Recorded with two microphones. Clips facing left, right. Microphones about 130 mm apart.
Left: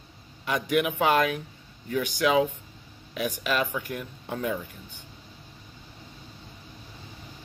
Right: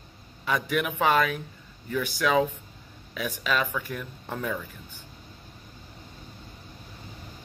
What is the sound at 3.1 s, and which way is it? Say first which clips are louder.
Speech: left 1 dB; 5° left (ahead or behind).